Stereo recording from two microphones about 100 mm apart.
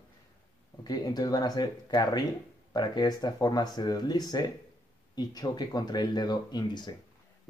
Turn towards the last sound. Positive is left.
turn(degrees=45)  # may be behind; listen again after turning